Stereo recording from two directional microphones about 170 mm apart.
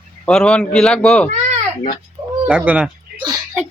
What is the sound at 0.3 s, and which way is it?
A man's voice, 5° left (ahead or behind).